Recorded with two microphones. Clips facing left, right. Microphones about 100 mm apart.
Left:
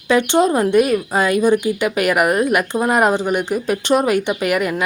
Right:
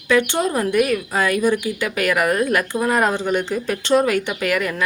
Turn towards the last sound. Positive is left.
turn(degrees=20)  # may be behind; listen again after turning